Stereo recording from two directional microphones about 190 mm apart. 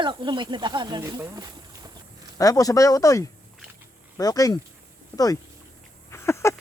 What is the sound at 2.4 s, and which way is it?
Speech, 20° left (ahead or behind).